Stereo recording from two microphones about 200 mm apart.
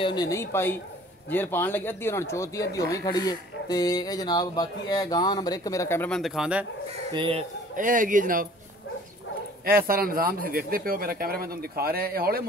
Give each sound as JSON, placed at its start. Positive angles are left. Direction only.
{"t": 0.0, "sound": "speech", "side_deg": 20}
{"t": 7.1, "sound": "speech", "side_deg": -25}
{"t": 7.7, "sound": "speech", "side_deg": -40}
{"t": 9.7, "sound": "speech", "side_deg": -45}